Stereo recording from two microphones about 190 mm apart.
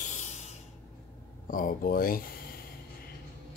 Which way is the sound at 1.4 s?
45° left (ahead or behind).